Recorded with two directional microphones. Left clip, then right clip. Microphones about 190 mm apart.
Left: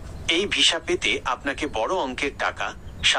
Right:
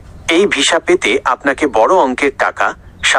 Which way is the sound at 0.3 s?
45° right (ahead or behind).